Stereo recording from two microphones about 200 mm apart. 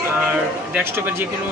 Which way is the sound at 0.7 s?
10° right (ahead or behind).